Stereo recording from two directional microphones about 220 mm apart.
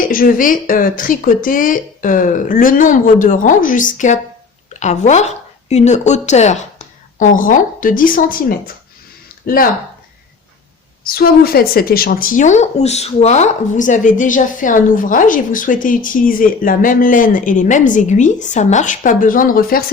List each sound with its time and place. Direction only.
0.1 s a woman's voice: 40° left (ahead or behind)
9.3 s a sound: 40° left (ahead or behind)
11.0 s a woman's voice: 45° left (ahead or behind)